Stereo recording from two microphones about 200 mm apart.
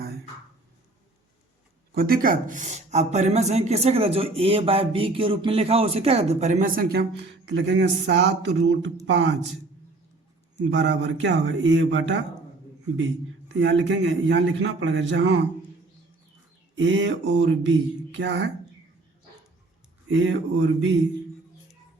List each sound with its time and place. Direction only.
2.0 s a man's voice: 45° right (ahead or behind); by 9.3 s 60° right (ahead or behind)
10.8 s a man's voice: 60° right (ahead or behind)
13.5 s a man's voice: 60° right (ahead or behind)
16.7 s a man's voice: 65° right (ahead or behind)
20.1 s a man's voice: 65° right (ahead or behind)